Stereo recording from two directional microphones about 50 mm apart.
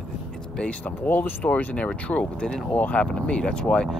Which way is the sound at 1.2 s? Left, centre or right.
Left.